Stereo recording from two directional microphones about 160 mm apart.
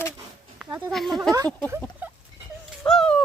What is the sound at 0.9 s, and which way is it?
Speech, centre (ahead or behind).